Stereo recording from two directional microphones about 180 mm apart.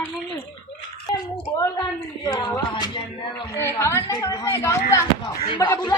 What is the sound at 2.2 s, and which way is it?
Speech, 20° left (ahead or behind).